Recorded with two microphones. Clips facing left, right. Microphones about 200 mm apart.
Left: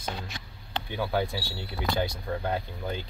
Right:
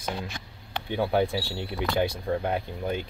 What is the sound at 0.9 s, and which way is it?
Speech, 25° right (ahead or behind).